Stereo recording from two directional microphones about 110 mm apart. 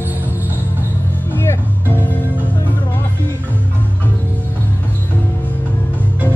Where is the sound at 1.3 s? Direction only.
20° left (ahead or behind).